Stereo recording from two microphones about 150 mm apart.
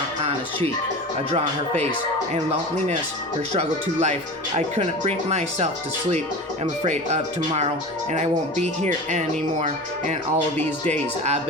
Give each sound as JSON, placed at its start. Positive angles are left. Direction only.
{"t": 1.3, "sound": "speech", "side_deg": -45}
{"t": 3.5, "sound": "speech", "side_deg": -45}
{"t": 6.8, "sound": "speech", "side_deg": -50}
{"t": 10.6, "sound": "speech", "side_deg": 10}